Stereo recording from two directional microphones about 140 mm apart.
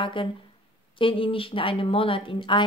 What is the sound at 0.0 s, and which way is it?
Speech, 35° left (ahead or behind).